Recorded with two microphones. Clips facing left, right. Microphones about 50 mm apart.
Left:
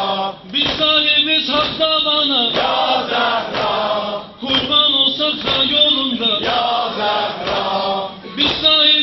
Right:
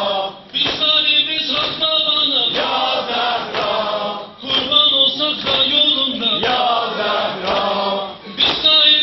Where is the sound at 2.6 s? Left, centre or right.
Centre.